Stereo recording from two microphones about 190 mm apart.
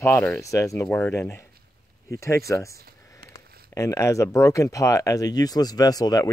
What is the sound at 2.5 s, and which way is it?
Speech, 15° left (ahead or behind).